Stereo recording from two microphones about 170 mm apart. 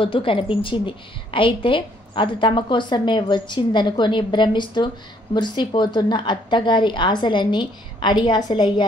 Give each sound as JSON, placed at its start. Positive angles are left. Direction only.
{"t": 0.0, "sound": "a woman's voice", "side_deg": 30}